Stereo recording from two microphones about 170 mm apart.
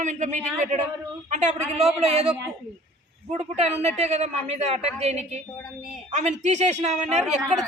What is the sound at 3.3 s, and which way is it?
A woman's voice, 40° right (ahead or behind).